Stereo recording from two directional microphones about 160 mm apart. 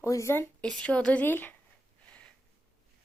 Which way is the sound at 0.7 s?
5° left (ahead or behind).